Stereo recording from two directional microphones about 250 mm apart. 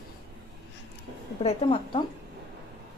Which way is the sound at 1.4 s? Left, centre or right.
Centre.